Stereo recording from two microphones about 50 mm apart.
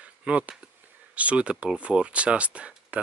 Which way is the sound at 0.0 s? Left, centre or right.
Right.